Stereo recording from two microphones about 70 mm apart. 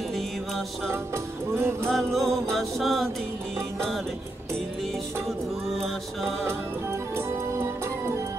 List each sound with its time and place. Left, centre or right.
0.8 s music: right
1.9 s music: centre
6.4 s music: right